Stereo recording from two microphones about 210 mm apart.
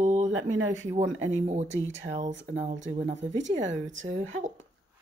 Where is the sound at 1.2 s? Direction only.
35° right (ahead or behind).